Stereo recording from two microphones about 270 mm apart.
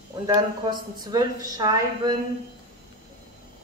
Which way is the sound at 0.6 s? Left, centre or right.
Centre.